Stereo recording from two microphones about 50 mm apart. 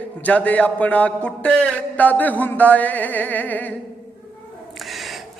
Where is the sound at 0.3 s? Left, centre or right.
Left.